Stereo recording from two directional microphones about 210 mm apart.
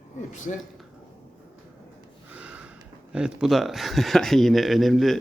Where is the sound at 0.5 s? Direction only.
40° left (ahead or behind).